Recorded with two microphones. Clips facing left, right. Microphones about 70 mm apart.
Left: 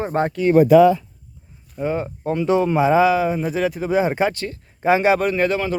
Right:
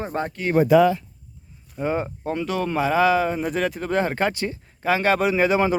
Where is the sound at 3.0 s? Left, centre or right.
Centre.